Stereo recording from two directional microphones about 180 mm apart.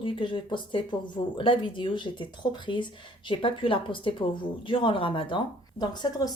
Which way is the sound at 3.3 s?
30° left (ahead or behind).